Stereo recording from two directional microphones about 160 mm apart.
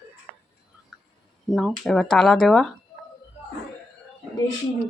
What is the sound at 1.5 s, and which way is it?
A woman's voice, centre (ahead or behind).